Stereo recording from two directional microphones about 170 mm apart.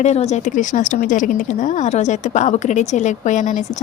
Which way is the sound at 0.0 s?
40° left (ahead or behind).